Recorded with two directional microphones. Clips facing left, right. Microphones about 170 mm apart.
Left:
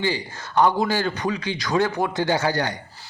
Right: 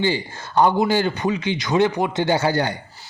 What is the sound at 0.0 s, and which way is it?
A man's voice, 25° right (ahead or behind).